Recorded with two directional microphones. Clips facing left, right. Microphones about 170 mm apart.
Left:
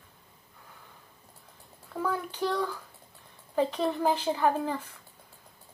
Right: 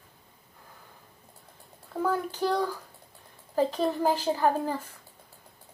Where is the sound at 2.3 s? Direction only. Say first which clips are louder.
Right 2 dB; 40° right (ahead or behind).